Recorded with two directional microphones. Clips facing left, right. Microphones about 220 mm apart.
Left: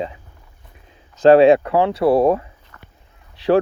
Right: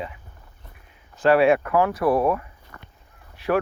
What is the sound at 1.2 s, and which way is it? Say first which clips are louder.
Speech: left 7 dB; 25° left (ahead or behind).